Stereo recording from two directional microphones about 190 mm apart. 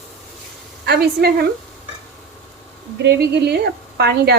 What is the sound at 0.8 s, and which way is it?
Speech, 55° right (ahead or behind).